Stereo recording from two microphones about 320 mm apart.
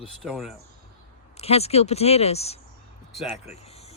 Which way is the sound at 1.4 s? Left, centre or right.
Centre.